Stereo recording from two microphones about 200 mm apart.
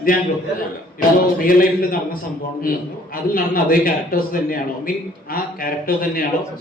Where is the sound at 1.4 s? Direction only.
45° left (ahead or behind).